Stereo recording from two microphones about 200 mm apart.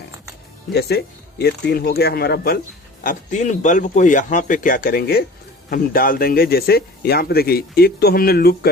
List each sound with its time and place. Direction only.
0.7 s speech: 55° left (ahead or behind)